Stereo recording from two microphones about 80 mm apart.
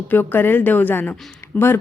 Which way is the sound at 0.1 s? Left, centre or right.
Left.